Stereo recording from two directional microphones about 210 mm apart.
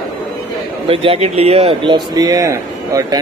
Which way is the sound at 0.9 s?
25° right (ahead or behind).